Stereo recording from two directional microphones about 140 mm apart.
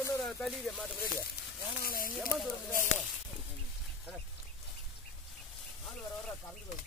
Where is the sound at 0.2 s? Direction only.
5° left (ahead or behind).